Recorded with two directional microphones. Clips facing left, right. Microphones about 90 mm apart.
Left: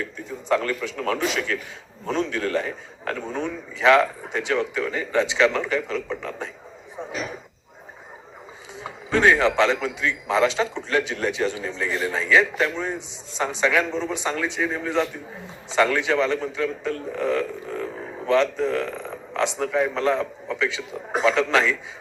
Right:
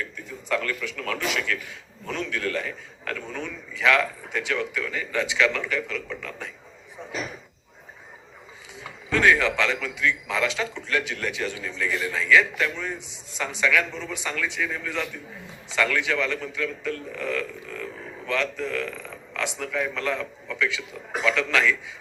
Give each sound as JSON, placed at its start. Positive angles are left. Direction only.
{"t": 0.0, "sound": "a man's voice", "side_deg": 25}
{"t": 8.8, "sound": "a man's voice", "side_deg": 25}